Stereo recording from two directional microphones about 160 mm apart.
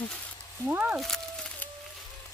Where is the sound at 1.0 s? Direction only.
5° left (ahead or behind).